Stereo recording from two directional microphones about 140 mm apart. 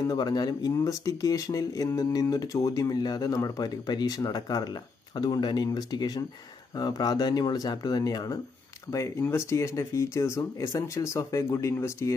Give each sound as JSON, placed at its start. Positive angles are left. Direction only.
{"t": 0.0, "sound": "speech", "side_deg": 30}